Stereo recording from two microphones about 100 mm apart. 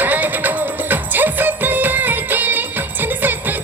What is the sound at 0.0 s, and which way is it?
Music, 15° right (ahead or behind).